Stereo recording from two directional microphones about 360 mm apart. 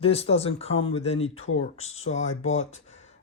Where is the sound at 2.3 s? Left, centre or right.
Left.